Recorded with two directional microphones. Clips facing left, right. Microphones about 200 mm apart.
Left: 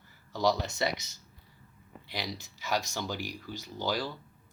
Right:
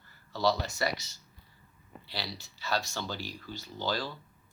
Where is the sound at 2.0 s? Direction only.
15° left (ahead or behind).